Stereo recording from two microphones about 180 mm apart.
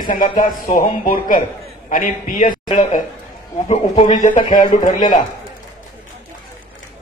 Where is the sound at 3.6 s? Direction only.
40° left (ahead or behind).